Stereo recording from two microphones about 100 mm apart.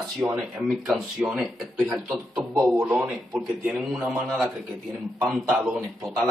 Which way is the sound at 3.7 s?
10° right (ahead or behind).